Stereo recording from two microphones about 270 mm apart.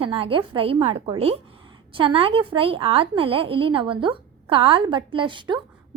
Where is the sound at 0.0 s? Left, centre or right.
Centre.